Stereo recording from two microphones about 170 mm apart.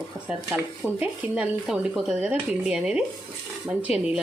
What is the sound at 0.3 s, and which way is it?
Speech, 5° right (ahead or behind).